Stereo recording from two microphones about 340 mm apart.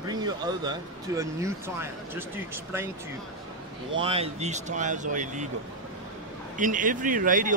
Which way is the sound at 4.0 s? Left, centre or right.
Centre.